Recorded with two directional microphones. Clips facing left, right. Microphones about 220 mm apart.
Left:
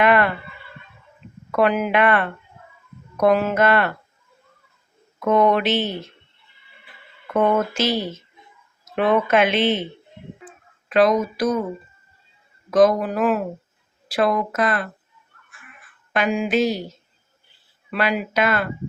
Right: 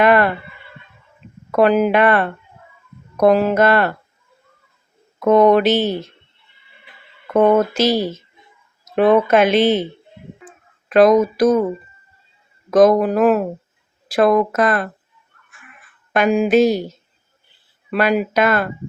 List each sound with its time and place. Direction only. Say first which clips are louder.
0.0 s a sound: right 3 dB; 40° right (ahead or behind)
1.5 s speech: right 5 dB; 35° right (ahead or behind)
5.2 s speech: right 6 dB; 40° right (ahead or behind)
7.3 s speech: right 6 dB; 35° right (ahead or behind)
10.8 s speech: right 6 dB; 50° right (ahead or behind)
12.7 s speech: right 4 dB; 50° right (ahead or behind)
16.1 s speech: right 6 dB; 45° right (ahead or behind)
17.9 s speech: right 5 dB; 45° right (ahead or behind)